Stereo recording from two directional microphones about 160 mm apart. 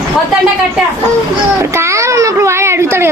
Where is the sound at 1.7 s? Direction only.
15° right (ahead or behind).